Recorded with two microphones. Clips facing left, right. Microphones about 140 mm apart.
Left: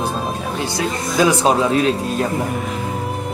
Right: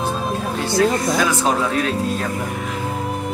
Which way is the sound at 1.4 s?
20° left (ahead or behind).